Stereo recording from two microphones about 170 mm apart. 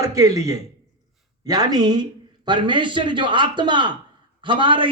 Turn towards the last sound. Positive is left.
turn(degrees=-30)  # may be behind; listen again after turning